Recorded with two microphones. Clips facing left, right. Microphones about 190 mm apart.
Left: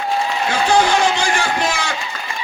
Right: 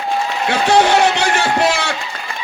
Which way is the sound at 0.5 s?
65° right (ahead or behind).